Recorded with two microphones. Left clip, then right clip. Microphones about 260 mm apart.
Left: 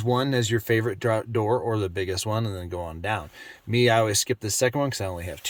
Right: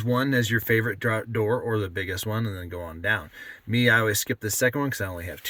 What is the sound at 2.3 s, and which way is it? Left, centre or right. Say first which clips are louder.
Speech: left 3 dB; left.